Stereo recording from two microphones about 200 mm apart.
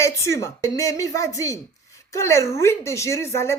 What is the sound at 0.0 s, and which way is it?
Speech, 15° left (ahead or behind).